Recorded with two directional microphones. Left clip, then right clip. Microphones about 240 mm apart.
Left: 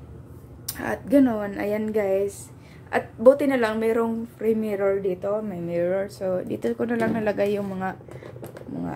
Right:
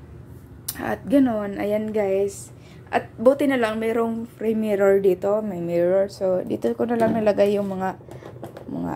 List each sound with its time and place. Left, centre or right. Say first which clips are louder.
0.7 s a woman's voice: right 1 dB; centre
8.5 s finger snapping: right 3 dB; centre